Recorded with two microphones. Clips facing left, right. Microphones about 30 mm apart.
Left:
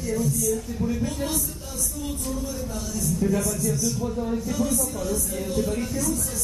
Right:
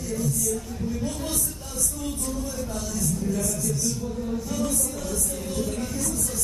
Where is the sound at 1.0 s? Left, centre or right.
Centre.